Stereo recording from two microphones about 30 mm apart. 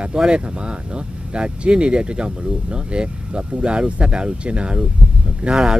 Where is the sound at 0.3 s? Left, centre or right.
Right.